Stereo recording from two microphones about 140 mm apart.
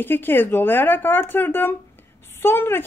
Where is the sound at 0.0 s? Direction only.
15° left (ahead or behind).